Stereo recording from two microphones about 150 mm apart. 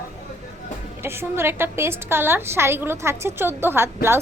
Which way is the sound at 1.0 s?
15° right (ahead or behind).